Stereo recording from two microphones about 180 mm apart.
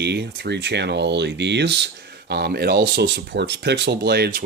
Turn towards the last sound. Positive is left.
turn(degrees=-55)  # may be behind; listen again after turning